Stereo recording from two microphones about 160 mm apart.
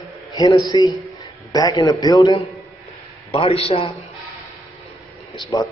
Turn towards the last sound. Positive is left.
turn(degrees=30)  # may be behind; listen again after turning